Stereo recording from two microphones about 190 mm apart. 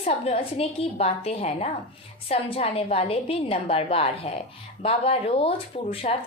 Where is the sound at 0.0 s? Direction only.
35° left (ahead or behind).